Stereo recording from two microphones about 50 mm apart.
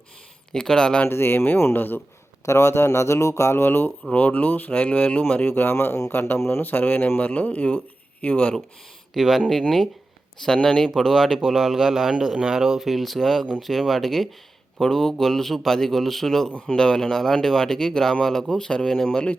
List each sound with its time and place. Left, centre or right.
0.5 s speech: centre
1.0 s speech: left
2.5 s speech: left
4.1 s speech: left
5.5 s speech: left
9.1 s speech: centre